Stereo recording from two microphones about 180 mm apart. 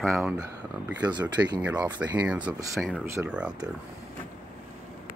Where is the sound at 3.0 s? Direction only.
15° right (ahead or behind).